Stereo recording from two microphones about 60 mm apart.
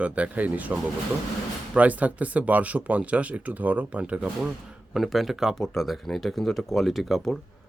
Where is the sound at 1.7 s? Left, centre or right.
Right.